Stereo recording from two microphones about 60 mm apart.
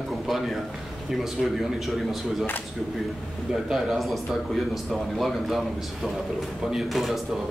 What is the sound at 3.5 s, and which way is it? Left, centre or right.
A man's voice, centre.